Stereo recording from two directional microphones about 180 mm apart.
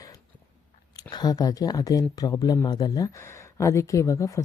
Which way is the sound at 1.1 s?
20° left (ahead or behind).